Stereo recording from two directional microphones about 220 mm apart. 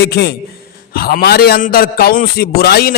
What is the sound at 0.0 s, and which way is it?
Speech, 50° left (ahead or behind).